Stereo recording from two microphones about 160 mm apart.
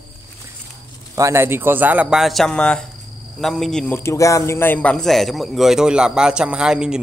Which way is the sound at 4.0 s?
20° left (ahead or behind).